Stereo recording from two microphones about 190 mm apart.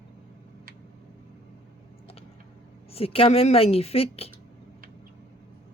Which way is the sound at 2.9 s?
30° left (ahead or behind).